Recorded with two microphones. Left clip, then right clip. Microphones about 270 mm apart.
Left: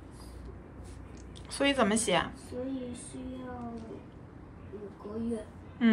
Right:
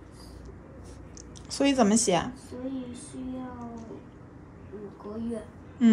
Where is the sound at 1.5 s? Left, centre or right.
Centre.